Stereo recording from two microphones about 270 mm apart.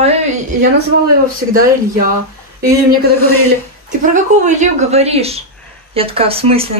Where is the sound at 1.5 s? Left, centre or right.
Right.